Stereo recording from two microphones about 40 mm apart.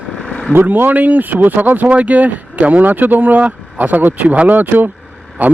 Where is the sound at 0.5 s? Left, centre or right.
Right.